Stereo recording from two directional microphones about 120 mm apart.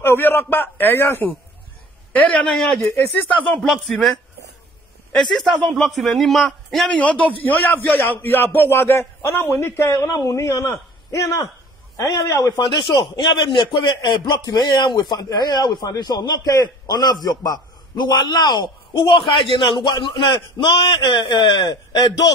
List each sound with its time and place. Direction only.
0.0 s a man's voice: 20° left (ahead or behind)
2.1 s a man's voice: 5° left (ahead or behind)
3.6 s a man's voice: 5° left (ahead or behind)
5.3 s a man's voice: centre (ahead or behind)
6.9 s a man's voice: 10° left (ahead or behind); by 22.3 s 30° left (ahead or behind)